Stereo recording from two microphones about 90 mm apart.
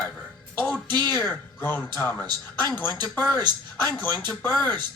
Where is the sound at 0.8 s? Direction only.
55° right (ahead or behind).